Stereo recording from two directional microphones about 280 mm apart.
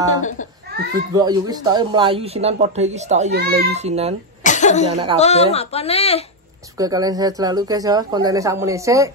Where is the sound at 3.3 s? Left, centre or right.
Right.